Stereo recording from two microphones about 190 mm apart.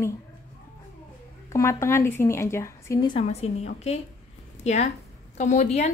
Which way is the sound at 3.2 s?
35° left (ahead or behind).